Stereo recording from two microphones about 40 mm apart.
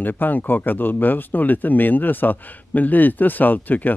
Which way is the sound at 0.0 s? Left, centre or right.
Left.